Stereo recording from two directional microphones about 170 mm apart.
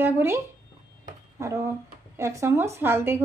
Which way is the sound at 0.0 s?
15° right (ahead or behind).